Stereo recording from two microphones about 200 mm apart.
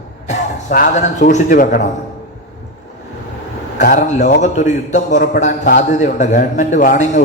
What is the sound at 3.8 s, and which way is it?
A man's voice, 45° left (ahead or behind).